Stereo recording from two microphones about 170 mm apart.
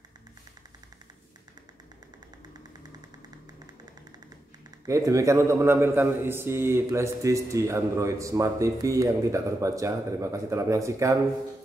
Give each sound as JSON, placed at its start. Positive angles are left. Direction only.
{"t": 4.8, "sound": "a man's voice", "side_deg": -20}